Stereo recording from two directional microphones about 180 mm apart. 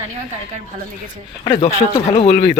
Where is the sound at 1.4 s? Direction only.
30° left (ahead or behind).